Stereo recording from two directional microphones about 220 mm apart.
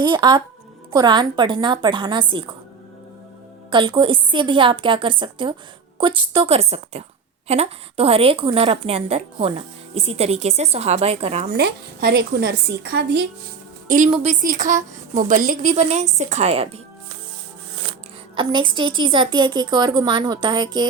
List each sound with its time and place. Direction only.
0.0 s a woman's voice: 20° right (ahead or behind)
3.7 s a woman's voice: 20° right (ahead or behind)
11.5 s a woman's voice: 45° right (ahead or behind)
13.8 s a woman's voice: 35° right (ahead or behind)
18.3 s a woman's voice: 20° right (ahead or behind)